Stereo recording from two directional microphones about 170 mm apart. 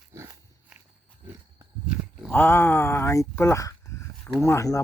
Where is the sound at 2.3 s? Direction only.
10° left (ahead or behind).